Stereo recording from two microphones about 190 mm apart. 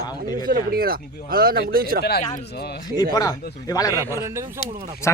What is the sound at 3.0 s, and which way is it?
Speech, 20° left (ahead or behind).